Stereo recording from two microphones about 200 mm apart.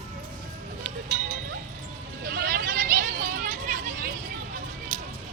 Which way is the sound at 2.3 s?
45° right (ahead or behind).